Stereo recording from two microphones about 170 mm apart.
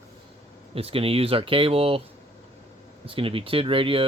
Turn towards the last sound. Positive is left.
turn(degrees=-30)  # may be behind; listen again after turning